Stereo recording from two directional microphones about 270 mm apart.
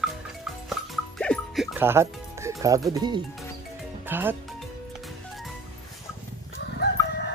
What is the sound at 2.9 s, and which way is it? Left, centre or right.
Speech, centre.